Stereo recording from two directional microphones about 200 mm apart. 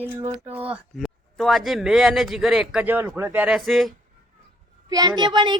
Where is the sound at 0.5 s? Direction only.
5° right (ahead or behind).